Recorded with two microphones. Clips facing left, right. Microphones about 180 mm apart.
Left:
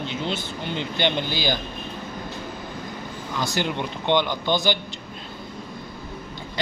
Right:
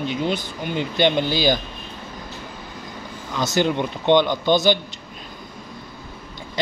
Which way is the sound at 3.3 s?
20° right (ahead or behind).